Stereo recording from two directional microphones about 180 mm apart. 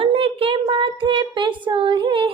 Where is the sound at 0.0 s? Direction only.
30° right (ahead or behind).